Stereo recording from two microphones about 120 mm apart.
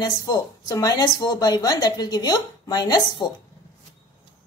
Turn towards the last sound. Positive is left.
turn(degrees=35)  # may be behind; listen again after turning